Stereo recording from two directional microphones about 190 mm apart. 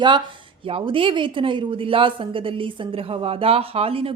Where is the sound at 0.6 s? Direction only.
30° right (ahead or behind).